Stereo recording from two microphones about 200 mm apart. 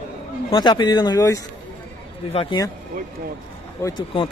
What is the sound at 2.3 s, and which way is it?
Speech, 30° left (ahead or behind).